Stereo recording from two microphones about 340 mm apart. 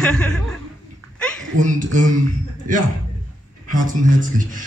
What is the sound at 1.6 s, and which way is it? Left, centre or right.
Speech, right.